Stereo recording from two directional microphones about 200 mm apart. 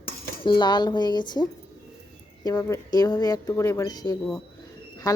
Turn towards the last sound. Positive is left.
turn(degrees=20)  # may be behind; listen again after turning